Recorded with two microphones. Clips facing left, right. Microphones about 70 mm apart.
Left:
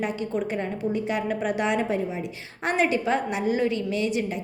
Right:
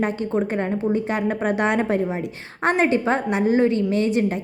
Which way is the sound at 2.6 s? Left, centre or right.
Right.